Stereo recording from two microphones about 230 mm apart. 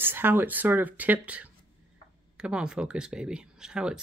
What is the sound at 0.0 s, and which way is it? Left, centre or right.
Speech, centre.